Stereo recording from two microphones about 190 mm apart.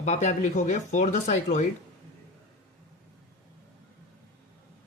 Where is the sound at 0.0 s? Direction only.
35° left (ahead or behind).